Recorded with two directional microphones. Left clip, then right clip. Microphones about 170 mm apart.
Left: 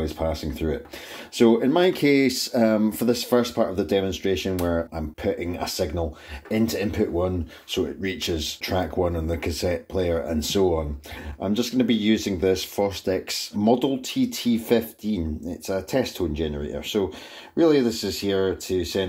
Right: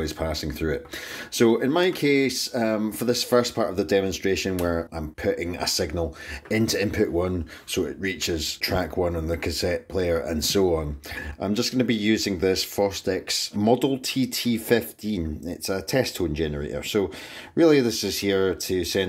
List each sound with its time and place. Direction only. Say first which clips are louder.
0.0 s speech: left 1 dB; 10° right (ahead or behind)
1.7 s speech: left 2 dB; centre (ahead or behind)
13.6 s speech: left 1 dB; 25° right (ahead or behind)